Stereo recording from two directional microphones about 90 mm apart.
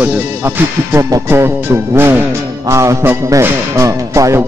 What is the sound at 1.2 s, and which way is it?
Speech, 30° right (ahead or behind).